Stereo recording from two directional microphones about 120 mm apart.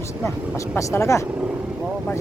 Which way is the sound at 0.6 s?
25° left (ahead or behind).